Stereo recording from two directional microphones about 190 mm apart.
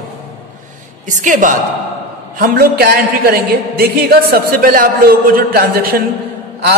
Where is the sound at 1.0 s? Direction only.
40° right (ahead or behind).